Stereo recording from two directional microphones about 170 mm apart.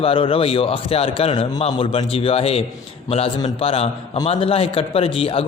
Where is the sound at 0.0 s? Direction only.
30° left (ahead or behind).